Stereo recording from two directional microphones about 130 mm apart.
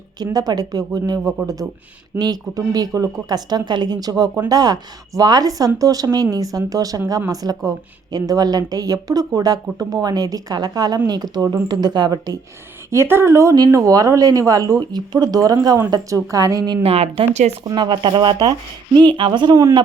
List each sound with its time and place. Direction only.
0.3 s a woman's voice: 30° right (ahead or behind)
12.9 s speech: 20° right (ahead or behind)
16.8 s speech: 50° right (ahead or behind)
17.7 s a woman's voice: 35° right (ahead or behind)